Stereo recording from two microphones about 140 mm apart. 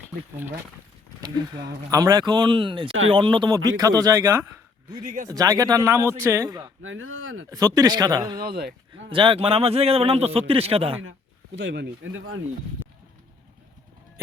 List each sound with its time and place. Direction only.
1.2 s speech: 25° right (ahead or behind)
5.0 s speech: 65° right (ahead or behind)
5.3 s a man's voice: 25° right (ahead or behind); by 11.0 s 45° right (ahead or behind)